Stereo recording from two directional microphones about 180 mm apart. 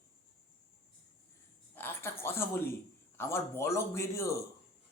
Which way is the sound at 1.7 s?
10° left (ahead or behind).